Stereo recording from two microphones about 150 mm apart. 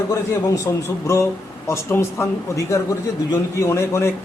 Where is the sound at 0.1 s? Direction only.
20° left (ahead or behind).